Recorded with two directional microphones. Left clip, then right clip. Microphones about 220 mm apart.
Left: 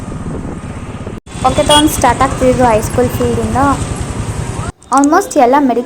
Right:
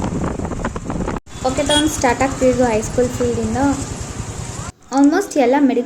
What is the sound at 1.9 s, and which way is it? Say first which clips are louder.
Speech: left 6 dB; 5° left (ahead or behind).